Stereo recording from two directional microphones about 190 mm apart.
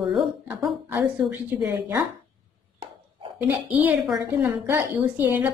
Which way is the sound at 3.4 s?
10° right (ahead or behind).